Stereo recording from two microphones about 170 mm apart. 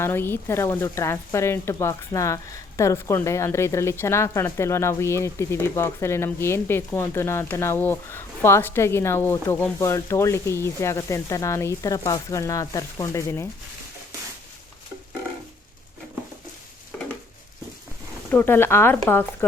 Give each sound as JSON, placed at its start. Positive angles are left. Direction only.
{"t": 0.0, "sound": "speech", "side_deg": 10}
{"t": 16.9, "sound": "a sound", "side_deg": 10}
{"t": 18.3, "sound": "speech", "side_deg": 10}